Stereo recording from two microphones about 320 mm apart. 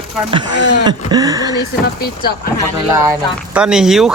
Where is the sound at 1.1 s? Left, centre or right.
Centre.